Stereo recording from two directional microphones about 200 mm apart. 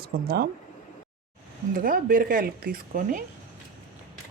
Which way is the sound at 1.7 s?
45° right (ahead or behind).